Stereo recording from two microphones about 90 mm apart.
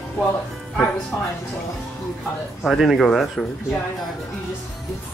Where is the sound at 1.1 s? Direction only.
30° left (ahead or behind).